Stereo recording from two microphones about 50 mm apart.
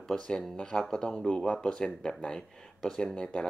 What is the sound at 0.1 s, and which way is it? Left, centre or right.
Speech, centre.